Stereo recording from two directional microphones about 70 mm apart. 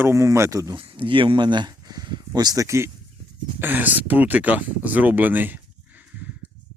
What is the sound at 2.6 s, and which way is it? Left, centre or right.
Speech, right.